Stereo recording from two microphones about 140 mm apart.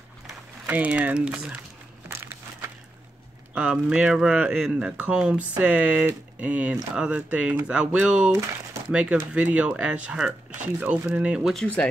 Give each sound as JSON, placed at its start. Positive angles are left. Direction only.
{"t": 0.7, "sound": "speech", "side_deg": -10}
{"t": 2.0, "sound": "a sound", "side_deg": -15}
{"t": 3.5, "sound": "speech", "side_deg": -10}
{"t": 11.6, "sound": "speech", "side_deg": 10}